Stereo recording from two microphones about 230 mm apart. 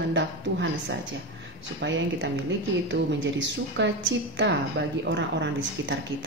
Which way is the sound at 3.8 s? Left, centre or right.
Right.